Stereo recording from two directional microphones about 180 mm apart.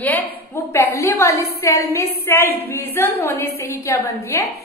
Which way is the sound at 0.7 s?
15° left (ahead or behind).